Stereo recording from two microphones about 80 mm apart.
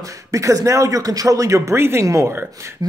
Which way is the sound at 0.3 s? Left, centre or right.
Right.